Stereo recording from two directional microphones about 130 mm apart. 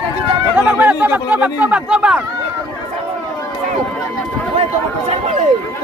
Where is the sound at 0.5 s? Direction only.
15° right (ahead or behind).